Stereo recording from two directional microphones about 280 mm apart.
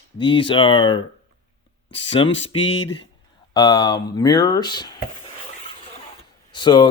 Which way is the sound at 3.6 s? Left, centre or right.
Centre.